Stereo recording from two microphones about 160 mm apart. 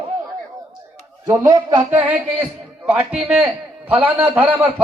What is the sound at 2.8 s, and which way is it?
A man's voice, 5° right (ahead or behind).